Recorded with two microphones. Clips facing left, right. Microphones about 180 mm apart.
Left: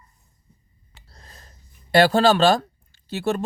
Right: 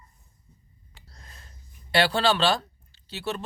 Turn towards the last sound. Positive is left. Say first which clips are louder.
# left 8 dB
turn(degrees=50)  # may be behind; listen again after turning